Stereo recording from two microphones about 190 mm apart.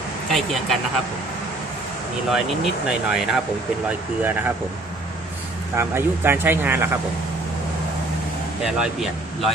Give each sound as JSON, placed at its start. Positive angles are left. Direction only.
{"t": 0.3, "sound": "speech", "side_deg": 0}
{"t": 2.3, "sound": "speech", "side_deg": -5}
{"t": 5.7, "sound": "speech", "side_deg": -10}
{"t": 8.6, "sound": "speech", "side_deg": 0}